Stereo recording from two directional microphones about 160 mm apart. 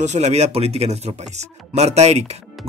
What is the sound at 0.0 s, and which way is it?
Speech, 45° right (ahead or behind).